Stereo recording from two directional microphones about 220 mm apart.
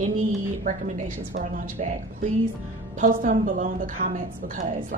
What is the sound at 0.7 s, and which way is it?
Speech, 35° right (ahead or behind).